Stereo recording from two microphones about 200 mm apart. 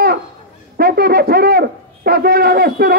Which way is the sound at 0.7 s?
50° right (ahead or behind).